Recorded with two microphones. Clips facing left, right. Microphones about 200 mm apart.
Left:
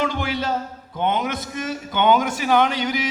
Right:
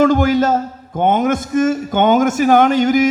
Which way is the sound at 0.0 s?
45° right (ahead or behind).